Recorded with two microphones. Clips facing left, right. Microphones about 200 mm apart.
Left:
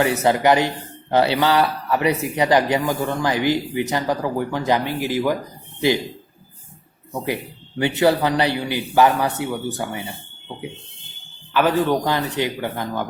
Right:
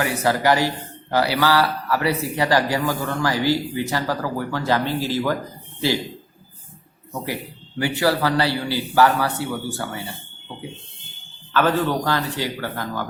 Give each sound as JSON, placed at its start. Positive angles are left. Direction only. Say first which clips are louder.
{"t": 0.0, "sound": "speech", "louder": "left 3 dB", "side_deg": 25}
{"t": 7.8, "sound": "a man's voice", "louder": "left 3 dB", "side_deg": 20}
{"t": 11.5, "sound": "speech", "louder": "left 2 dB", "side_deg": 15}